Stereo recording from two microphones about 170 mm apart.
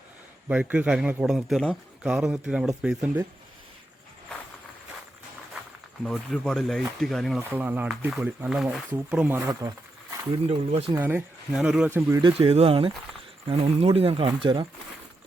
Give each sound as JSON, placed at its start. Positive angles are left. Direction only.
{"t": 0.4, "sound": "speech", "side_deg": -5}
{"t": 6.0, "sound": "speech", "side_deg": 5}
{"t": 7.5, "sound": "speech", "side_deg": -10}
{"t": 10.3, "sound": "speech", "side_deg": -35}
{"t": 10.9, "sound": "speech", "side_deg": -10}
{"t": 12.2, "sound": "speech", "side_deg": -35}